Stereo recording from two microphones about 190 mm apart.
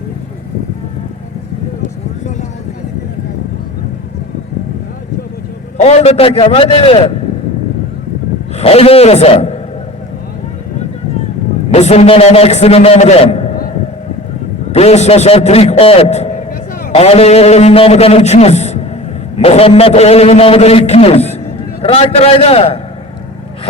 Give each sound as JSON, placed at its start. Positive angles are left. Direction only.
{"t": 5.7, "sound": "a man's voice", "side_deg": 35}
{"t": 8.5, "sound": "a man's voice", "side_deg": 30}
{"t": 11.7, "sound": "a man's voice", "side_deg": 35}
{"t": 14.7, "sound": "a man's voice", "side_deg": 35}